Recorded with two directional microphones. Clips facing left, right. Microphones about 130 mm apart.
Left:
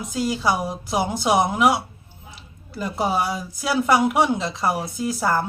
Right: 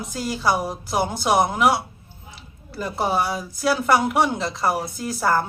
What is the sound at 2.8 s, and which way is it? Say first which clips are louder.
Speech: even; 5° left (ahead or behind).